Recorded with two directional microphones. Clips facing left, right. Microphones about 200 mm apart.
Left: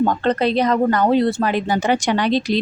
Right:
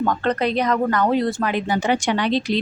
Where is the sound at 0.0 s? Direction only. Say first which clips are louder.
Left 3 dB; 30° left (ahead or behind).